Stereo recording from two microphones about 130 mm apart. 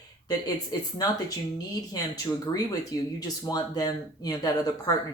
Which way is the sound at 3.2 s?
30° left (ahead or behind).